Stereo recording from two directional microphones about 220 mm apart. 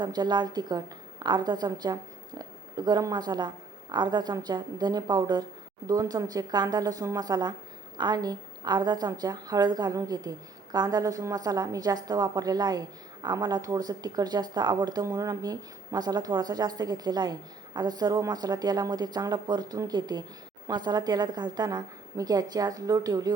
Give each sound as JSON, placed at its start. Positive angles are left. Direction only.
{"t": 0.0, "sound": "a woman's voice", "side_deg": -20}